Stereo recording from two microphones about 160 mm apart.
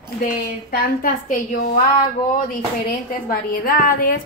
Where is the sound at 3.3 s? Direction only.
65° left (ahead or behind).